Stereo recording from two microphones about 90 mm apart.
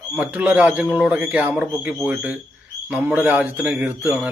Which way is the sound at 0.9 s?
10° right (ahead or behind).